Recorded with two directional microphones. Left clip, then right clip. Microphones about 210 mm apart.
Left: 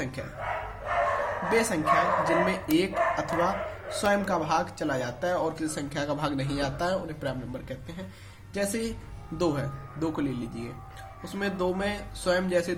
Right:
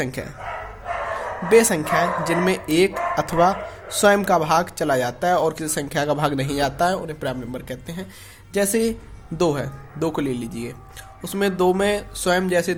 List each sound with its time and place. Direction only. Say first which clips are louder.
0.0 s speech: right 8 dB; 45° right (ahead or behind)
1.5 s speech: right 9 dB; 45° right (ahead or behind)